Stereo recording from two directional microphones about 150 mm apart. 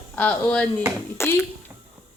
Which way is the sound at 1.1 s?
15° left (ahead or behind).